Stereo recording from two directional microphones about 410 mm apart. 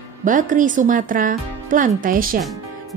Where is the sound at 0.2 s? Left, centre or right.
Centre.